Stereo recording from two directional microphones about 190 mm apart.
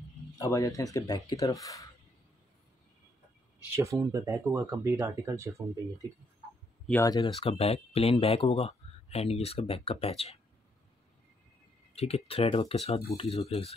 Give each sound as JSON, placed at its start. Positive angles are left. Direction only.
{"t": 0.4, "sound": "speech", "side_deg": 15}
{"t": 3.7, "sound": "speech", "side_deg": -15}
{"t": 6.9, "sound": "speech", "side_deg": 15}
{"t": 7.2, "sound": "speech", "side_deg": 30}
{"t": 11.9, "sound": "speech", "side_deg": 30}